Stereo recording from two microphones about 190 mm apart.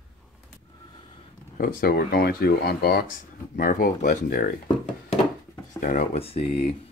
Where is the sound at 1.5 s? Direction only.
50° left (ahead or behind).